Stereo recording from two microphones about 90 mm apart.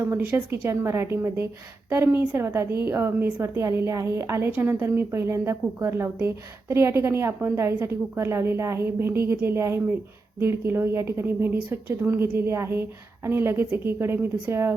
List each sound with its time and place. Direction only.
0.0 s a woman's voice: 25° right (ahead or behind)